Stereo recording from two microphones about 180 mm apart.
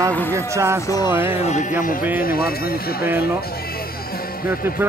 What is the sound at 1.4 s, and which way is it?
Speech, 40° left (ahead or behind).